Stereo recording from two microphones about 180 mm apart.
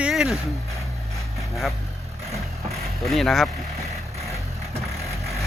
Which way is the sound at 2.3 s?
Centre (ahead or behind).